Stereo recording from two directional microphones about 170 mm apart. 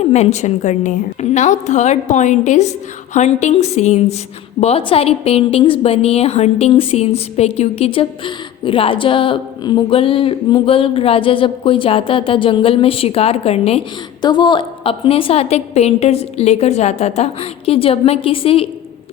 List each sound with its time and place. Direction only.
0.0 s a woman's voice: 40° left (ahead or behind)
14.2 s a woman's voice: 25° left (ahead or behind)